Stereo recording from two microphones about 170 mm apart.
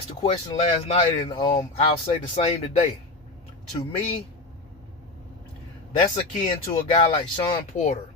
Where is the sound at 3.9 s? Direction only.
35° left (ahead or behind).